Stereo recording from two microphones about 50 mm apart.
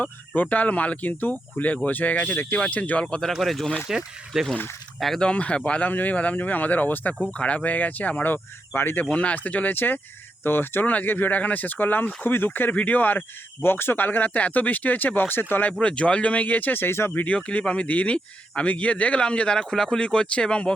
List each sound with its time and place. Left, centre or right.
0.0 s speech: left
2.6 s speech: left
3.3 s speech: centre
3.9 s speech: centre
5.2 s a man's voice: left
5.9 s a man's voice: left
8.3 s speech: left
9.1 s speech: left
15.8 s speech: left
17.3 s a man's voice: left